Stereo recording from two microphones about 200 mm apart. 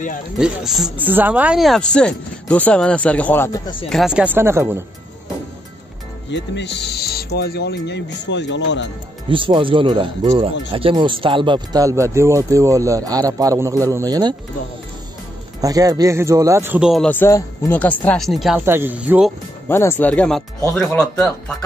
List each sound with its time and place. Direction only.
0.4 s speech: centre (ahead or behind); by 3.7 s 15° left (ahead or behind)
3.9 s speech: 5° right (ahead or behind)
6.3 s speech: 60° left (ahead or behind)
9.3 s speech: 25° right (ahead or behind)
15.6 s speech: 20° right (ahead or behind)
19.7 s speech: 10° left (ahead or behind)